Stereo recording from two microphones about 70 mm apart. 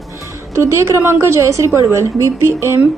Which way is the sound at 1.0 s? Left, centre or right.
Right.